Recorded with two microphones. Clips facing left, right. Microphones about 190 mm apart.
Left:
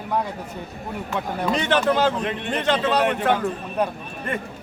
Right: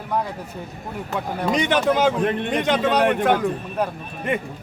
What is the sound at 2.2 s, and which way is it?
Speech, 50° right (ahead or behind).